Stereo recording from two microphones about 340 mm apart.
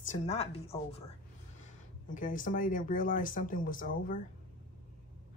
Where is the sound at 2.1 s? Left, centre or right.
Left.